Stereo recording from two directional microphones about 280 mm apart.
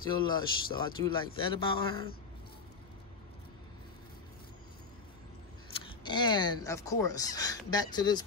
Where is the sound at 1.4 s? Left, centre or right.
Centre.